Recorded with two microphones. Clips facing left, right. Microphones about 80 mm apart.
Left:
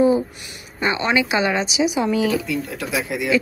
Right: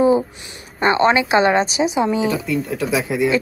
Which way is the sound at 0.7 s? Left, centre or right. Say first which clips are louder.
Right 5 dB; right.